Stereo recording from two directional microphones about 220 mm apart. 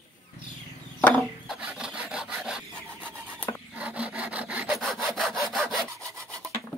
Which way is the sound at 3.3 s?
10° left (ahead or behind).